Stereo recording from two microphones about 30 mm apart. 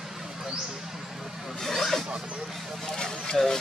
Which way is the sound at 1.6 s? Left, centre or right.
Centre.